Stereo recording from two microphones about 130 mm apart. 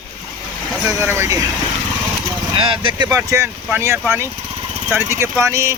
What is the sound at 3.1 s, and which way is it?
Speech, 25° right (ahead or behind).